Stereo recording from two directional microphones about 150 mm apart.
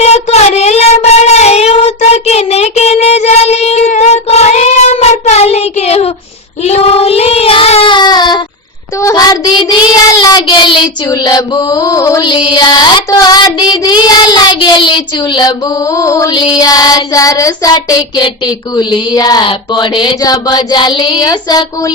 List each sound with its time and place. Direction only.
0.0 s child singing: 45° left (ahead or behind); by 10.4 s 20° left (ahead or behind)
11.3 s mantra: 25° left (ahead or behind)
12.2 s child singing: 30° left (ahead or behind)
16.0 s a sound: 20° left (ahead or behind)